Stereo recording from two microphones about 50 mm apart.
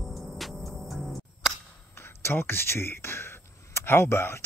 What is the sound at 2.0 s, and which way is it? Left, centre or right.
Speech, left.